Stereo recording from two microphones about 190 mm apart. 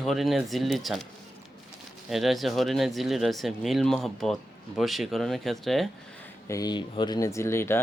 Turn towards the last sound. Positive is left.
turn(degrees=15)  # may be behind; listen again after turning